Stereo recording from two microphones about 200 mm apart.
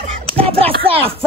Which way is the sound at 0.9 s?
30° right (ahead or behind).